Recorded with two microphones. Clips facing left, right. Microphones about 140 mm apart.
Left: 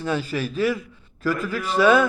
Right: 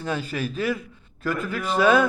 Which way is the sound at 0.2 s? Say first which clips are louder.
Left 4 dB; 35° left (ahead or behind).